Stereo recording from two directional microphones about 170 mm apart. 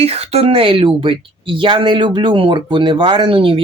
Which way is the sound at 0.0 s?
35° right (ahead or behind).